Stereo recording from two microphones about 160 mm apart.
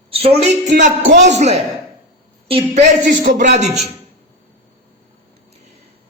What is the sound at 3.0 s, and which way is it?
Speech, 90° right.